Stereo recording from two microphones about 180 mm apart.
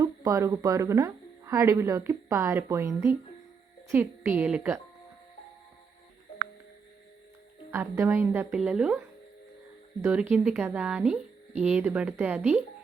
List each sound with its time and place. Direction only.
0.0 s speech: 20° right (ahead or behind)
7.7 s speech: 15° right (ahead or behind)